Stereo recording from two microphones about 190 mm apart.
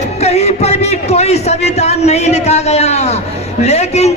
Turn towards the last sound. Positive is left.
turn(degrees=35)  # may be behind; listen again after turning